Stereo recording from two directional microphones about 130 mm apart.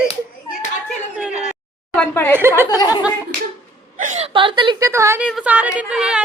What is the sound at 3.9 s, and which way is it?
Whimper, 75° right (ahead or behind).